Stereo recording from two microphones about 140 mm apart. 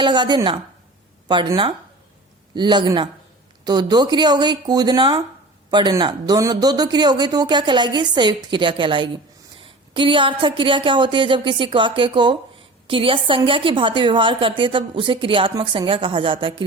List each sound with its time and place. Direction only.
0.0 s a woman's voice: 35° right (ahead or behind)
2.6 s a woman's voice: 30° right (ahead or behind)